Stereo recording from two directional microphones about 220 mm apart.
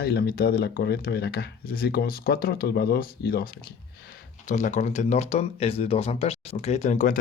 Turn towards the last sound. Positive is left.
turn(degrees=35)  # may be behind; listen again after turning